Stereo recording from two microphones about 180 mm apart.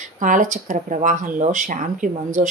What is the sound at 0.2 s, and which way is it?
A woman's voice, 45° right (ahead or behind).